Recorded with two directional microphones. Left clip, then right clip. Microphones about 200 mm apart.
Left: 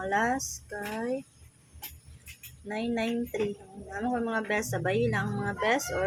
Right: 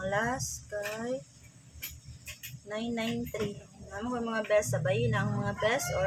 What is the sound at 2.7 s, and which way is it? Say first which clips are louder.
Speech: left 3 dB; 25° left (ahead or behind).